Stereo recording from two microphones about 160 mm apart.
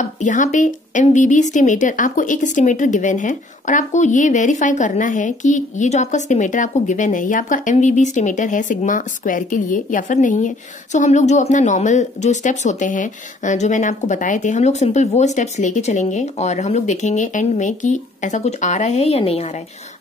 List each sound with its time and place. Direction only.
0.0 s speech: 50° left (ahead or behind)